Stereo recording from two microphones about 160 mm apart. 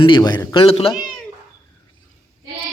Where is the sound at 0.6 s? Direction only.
35° left (ahead or behind).